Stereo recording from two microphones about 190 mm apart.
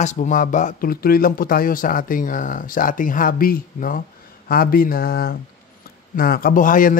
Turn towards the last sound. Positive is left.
turn(degrees=45)  # may be behind; listen again after turning